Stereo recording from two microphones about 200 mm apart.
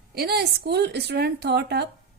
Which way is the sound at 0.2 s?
55° right (ahead or behind).